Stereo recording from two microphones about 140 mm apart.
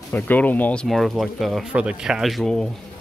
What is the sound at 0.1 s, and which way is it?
Speech, 10° left (ahead or behind).